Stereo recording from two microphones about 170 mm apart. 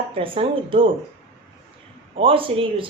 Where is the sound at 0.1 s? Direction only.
30° right (ahead or behind).